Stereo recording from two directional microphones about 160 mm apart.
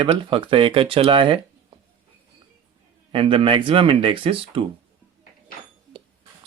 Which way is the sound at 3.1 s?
35° right (ahead or behind).